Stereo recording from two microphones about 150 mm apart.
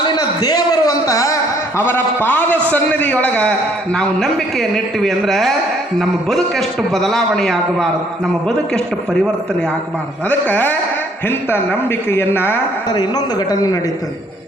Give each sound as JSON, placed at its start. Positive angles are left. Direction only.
{"t": 0.2, "sound": "a sound", "side_deg": 25}
{"t": 2.2, "sound": "a man's voice", "side_deg": 10}
{"t": 10.2, "sound": "speech", "side_deg": 10}
{"t": 12.9, "sound": "a man's voice", "side_deg": 25}